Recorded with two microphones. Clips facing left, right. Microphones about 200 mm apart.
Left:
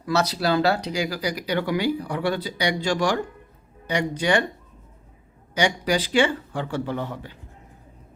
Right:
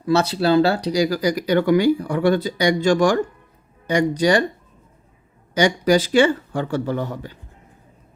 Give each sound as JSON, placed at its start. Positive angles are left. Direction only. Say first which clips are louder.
{"t": 0.0, "sound": "speech", "louder": "right 5 dB", "side_deg": -30}
{"t": 5.5, "sound": "speech", "louder": "right 6 dB", "side_deg": -45}